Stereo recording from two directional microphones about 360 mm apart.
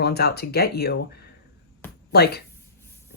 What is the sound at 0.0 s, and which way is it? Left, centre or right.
Speech, left.